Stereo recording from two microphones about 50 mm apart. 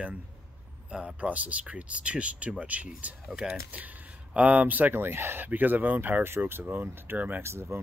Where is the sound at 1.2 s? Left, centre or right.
Right.